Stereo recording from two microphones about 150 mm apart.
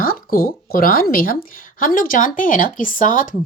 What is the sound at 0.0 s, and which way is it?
A woman's voice, 75° left (ahead or behind).